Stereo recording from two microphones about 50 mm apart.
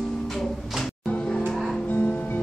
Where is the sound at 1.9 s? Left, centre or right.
Left.